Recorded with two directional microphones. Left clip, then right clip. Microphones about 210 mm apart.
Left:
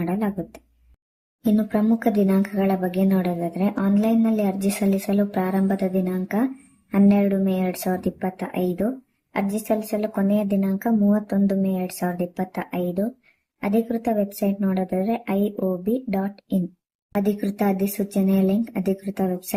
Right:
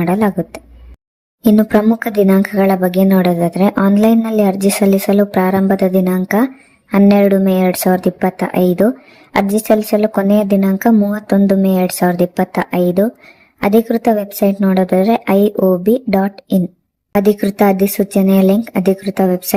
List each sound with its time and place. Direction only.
0.0 s speech: 40° right (ahead or behind)